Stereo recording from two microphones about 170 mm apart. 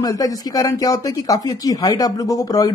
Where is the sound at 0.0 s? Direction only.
20° left (ahead or behind).